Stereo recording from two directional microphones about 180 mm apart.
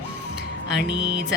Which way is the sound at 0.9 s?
80° left.